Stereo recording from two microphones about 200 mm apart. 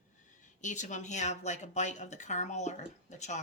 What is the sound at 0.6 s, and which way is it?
A woman's voice, 40° left (ahead or behind).